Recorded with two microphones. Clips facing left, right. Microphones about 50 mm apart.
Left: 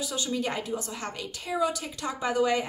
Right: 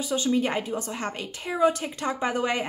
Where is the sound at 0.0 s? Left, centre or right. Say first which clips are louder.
Right 6 dB; right.